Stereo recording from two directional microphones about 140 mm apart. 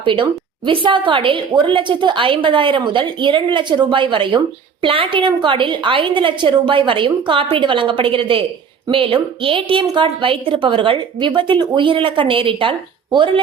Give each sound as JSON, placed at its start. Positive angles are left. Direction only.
{"t": 0.0, "sound": "a woman's voice", "side_deg": -35}